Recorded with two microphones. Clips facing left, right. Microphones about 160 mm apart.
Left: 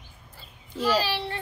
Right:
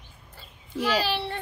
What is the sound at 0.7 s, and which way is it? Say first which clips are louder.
Speech: left 1 dB; 10° right (ahead or behind).